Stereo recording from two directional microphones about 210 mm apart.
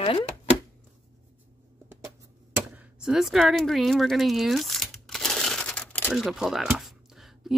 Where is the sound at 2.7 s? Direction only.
5° right (ahead or behind).